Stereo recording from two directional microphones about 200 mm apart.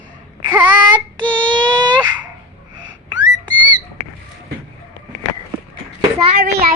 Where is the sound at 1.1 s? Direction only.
25° right (ahead or behind).